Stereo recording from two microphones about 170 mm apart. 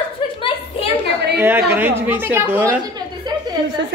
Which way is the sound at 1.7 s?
10° right (ahead or behind).